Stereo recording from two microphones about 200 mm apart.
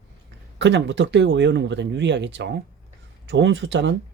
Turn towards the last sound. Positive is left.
turn(degrees=-60)  # may be behind; listen again after turning